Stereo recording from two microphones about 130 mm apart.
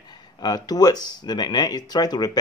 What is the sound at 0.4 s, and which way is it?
Speech, 30° left (ahead or behind).